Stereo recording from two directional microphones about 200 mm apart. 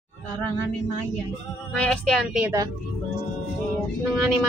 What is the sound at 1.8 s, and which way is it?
Music, 5° left (ahead or behind).